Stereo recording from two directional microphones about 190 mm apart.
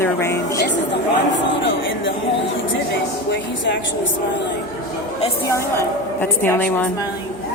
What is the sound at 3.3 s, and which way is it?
Speech, 70° left (ahead or behind).